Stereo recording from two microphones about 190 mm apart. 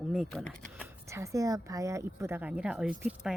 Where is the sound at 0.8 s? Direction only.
15° right (ahead or behind).